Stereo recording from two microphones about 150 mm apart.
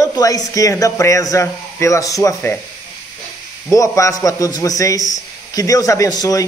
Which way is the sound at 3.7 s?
20° left (ahead or behind).